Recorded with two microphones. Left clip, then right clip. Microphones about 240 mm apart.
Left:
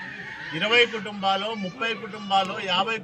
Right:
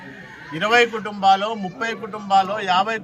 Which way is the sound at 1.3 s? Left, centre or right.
Centre.